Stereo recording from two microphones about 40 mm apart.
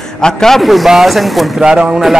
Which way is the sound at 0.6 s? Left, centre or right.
Centre.